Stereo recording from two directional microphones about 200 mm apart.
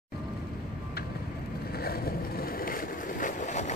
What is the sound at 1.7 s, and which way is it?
Vehicle, 50° left (ahead or behind).